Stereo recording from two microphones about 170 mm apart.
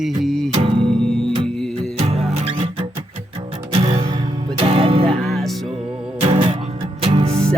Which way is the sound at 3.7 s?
30° right (ahead or behind).